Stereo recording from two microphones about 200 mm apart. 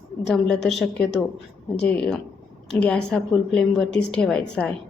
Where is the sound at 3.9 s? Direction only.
60° left (ahead or behind).